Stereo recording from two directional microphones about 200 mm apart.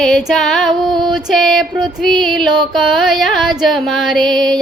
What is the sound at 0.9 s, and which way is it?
Female singing, 20° right (ahead or behind).